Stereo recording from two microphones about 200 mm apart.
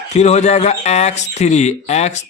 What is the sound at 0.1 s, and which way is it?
Speech, 35° left (ahead or behind).